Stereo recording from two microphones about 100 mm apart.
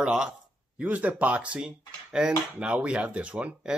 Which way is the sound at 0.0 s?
10° right (ahead or behind).